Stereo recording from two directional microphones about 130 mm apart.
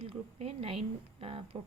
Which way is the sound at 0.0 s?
50° right (ahead or behind).